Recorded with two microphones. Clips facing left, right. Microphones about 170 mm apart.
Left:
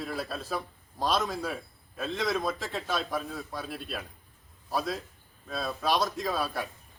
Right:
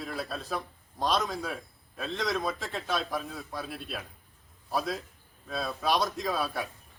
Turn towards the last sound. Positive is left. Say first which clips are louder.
# even
turn(degrees=0)  # may be behind; listen again after turning